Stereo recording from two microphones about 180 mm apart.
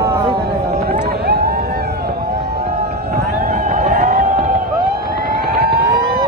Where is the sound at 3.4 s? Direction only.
45° right (ahead or behind).